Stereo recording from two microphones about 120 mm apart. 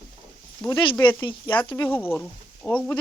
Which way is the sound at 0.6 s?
35° left (ahead or behind).